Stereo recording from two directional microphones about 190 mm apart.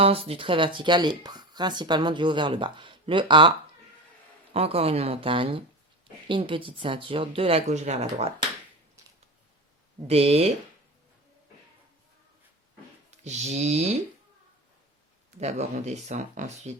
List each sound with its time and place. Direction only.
0.0 s speech: 30° right (ahead or behind)
4.5 s speech: 30° right (ahead or behind)
10.1 s speech: 30° right (ahead or behind)
13.1 s speech: 35° right (ahead or behind)
15.4 s speech: 35° right (ahead or behind)